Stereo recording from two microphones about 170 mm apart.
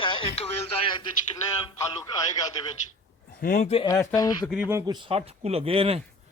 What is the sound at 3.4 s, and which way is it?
Speech, 55° left (ahead or behind).